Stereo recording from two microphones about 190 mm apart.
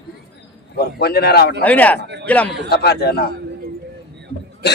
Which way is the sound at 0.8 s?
55° left (ahead or behind).